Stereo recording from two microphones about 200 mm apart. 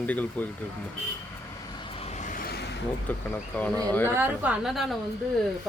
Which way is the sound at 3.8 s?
10° left (ahead or behind).